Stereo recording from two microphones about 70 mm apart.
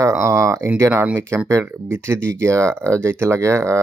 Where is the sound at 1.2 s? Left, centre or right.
Right.